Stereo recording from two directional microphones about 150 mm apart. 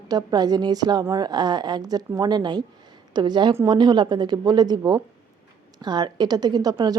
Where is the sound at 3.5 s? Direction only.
20° right (ahead or behind).